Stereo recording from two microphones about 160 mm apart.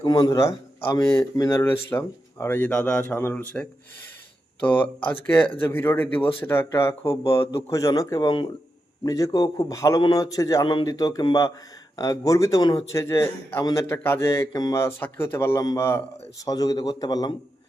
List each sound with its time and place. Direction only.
0.0 s speech: 25° left (ahead or behind)